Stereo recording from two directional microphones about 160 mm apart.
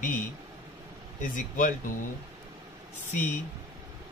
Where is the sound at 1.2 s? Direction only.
55° left (ahead or behind).